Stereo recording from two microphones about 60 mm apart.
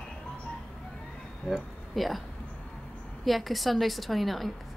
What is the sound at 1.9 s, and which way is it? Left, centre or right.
Speech, centre.